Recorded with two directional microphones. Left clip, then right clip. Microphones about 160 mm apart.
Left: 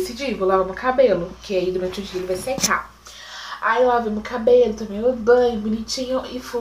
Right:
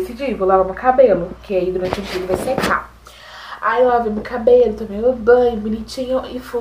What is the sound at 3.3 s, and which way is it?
A woman's voice, 35° left (ahead or behind).